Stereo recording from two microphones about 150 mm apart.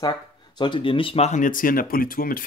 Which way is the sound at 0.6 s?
35° left (ahead or behind).